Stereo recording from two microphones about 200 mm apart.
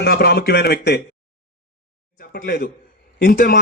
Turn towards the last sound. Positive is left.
turn(degrees=50)  # may be behind; listen again after turning